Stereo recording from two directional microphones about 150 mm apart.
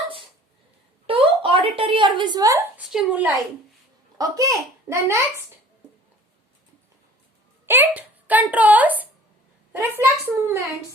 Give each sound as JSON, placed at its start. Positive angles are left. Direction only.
{"t": 1.0, "sound": "a sound", "side_deg": -35}
{"t": 2.7, "sound": "a child's voice", "side_deg": -5}
{"t": 4.2, "sound": "a child's voice", "side_deg": -25}
{"t": 7.7, "sound": "a child's voice", "side_deg": -10}